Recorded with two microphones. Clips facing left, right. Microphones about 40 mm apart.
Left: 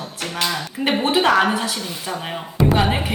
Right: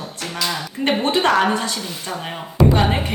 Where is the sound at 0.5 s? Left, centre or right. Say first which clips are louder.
Right 3 dB; centre.